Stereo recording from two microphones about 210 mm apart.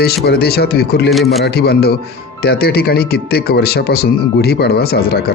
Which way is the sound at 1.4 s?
50° left (ahead or behind).